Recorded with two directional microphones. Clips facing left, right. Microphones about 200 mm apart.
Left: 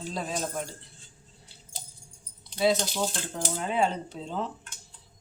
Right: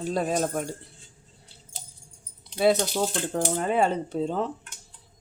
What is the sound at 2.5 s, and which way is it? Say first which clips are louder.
Speech: right 3 dB; 55° right (ahead or behind).